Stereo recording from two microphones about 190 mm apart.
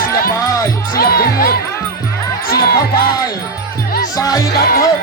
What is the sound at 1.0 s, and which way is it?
Speech, 50° left (ahead or behind).